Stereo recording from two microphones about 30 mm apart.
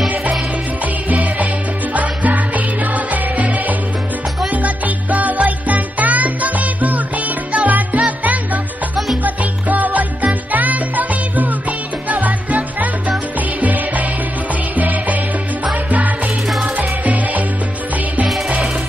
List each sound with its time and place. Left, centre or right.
1.0 s music: right
8.9 s salsa music: centre
9.2 s music: right
16.4 s music: centre
16.7 s music: right